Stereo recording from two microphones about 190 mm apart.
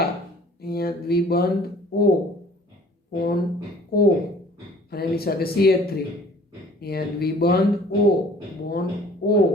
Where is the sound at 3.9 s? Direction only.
55° left (ahead or behind).